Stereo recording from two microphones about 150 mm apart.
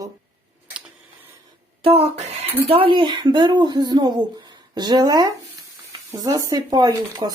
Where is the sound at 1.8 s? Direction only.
40° right (ahead or behind).